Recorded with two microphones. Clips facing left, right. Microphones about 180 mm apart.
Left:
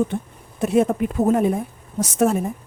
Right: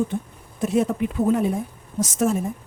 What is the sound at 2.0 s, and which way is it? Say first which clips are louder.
Speech: left 3 dB; 60° left (ahead or behind).